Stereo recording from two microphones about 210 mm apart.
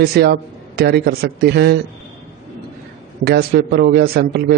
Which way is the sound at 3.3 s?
50° right (ahead or behind).